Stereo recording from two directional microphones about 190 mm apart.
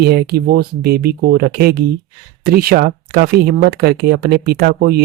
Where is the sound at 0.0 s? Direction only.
55° right (ahead or behind).